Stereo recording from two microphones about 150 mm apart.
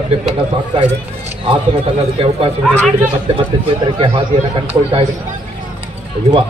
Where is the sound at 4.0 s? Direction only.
35° right (ahead or behind).